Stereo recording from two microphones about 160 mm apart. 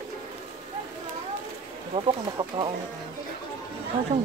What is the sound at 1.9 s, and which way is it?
Speech, 30° right (ahead or behind).